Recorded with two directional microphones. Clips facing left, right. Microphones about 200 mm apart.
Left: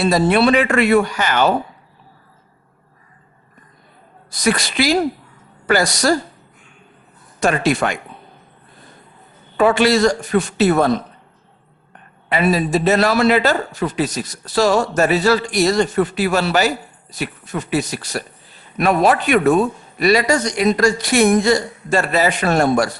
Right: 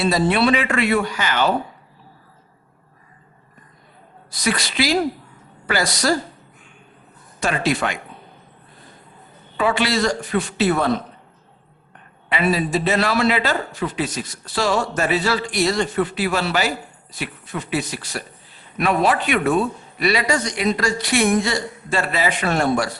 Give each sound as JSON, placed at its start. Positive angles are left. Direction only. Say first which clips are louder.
{"t": 0.0, "sound": "a man's voice", "louder": "left 3 dB", "side_deg": 45}
{"t": 4.3, "sound": "a man's voice", "louder": "left 5 dB", "side_deg": 45}
{"t": 7.3, "sound": "a man's voice", "louder": "left 4 dB", "side_deg": 45}
{"t": 9.6, "sound": "a man's voice", "louder": "left 6 dB", "side_deg": 45}
{"t": 12.3, "sound": "a man's voice", "louder": "left 3 dB", "side_deg": 40}